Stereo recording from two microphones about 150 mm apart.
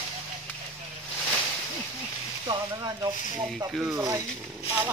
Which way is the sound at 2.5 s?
30° right (ahead or behind).